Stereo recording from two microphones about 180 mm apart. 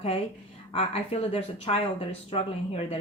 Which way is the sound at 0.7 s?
35° left (ahead or behind).